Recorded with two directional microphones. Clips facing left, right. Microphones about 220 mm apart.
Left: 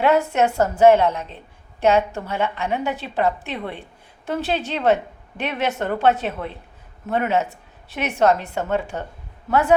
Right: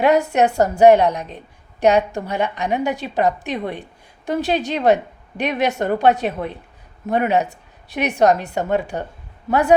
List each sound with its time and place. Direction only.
0.0 s a woman's voice: 15° right (ahead or behind)